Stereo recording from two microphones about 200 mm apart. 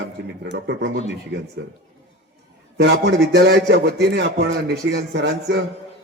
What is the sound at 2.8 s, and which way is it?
A man's voice, 55° right (ahead or behind).